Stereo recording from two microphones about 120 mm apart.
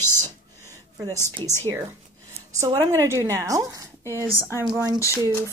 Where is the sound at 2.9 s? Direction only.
25° right (ahead or behind).